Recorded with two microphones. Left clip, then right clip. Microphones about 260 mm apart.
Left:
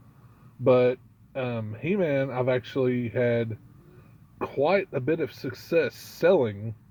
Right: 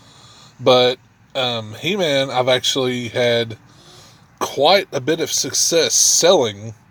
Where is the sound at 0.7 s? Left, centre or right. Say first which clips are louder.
Right 7 dB; centre.